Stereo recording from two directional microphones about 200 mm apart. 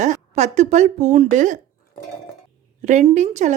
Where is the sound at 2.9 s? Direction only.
35° right (ahead or behind).